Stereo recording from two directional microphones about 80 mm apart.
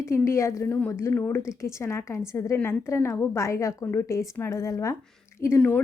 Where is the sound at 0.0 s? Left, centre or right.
Left.